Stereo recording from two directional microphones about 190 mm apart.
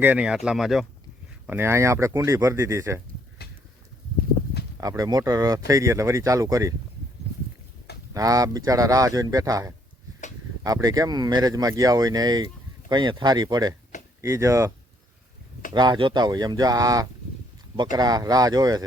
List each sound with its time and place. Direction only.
0.0 s speech: 5° right (ahead or behind)
1.5 s speech: 10° right (ahead or behind)
4.8 s speech: 20° right (ahead or behind)
8.1 s speech: 20° right (ahead or behind)
15.7 s speech: 25° right (ahead or behind)